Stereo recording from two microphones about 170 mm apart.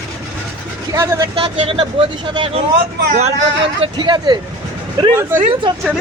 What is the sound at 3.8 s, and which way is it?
A man's voice, 30° right (ahead or behind).